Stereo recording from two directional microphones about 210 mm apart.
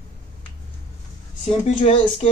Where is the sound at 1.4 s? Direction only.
30° left (ahead or behind).